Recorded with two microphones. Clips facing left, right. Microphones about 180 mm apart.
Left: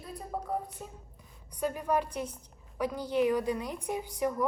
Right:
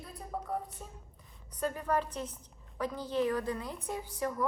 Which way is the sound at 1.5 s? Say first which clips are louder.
Left 2 dB; 10° left (ahead or behind).